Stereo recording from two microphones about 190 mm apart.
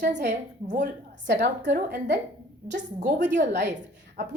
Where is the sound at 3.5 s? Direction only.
65° right (ahead or behind).